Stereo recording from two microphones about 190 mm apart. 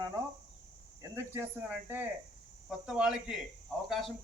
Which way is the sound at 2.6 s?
5° right (ahead or behind).